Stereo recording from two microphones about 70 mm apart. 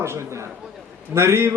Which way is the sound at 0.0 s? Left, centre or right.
Right.